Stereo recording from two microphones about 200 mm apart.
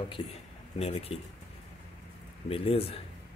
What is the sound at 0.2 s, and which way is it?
Speech, 25° left (ahead or behind).